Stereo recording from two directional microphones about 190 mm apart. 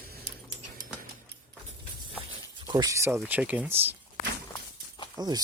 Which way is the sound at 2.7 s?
20° right (ahead or behind).